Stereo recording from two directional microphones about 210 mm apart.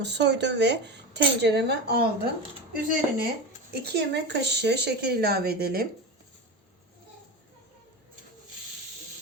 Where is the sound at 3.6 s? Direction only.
50° right (ahead or behind).